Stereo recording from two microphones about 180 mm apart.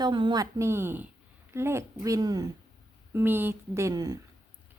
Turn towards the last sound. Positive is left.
turn(degrees=-20)  # may be behind; listen again after turning